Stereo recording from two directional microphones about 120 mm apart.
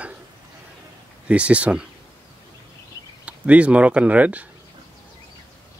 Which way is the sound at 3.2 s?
10° right (ahead or behind).